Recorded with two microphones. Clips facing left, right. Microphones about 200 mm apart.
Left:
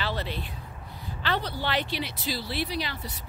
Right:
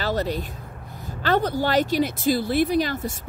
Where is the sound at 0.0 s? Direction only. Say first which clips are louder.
Right 7 dB; 40° right (ahead or behind).